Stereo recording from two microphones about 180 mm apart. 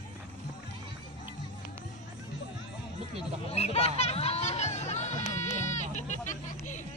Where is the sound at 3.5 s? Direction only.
35° left (ahead or behind).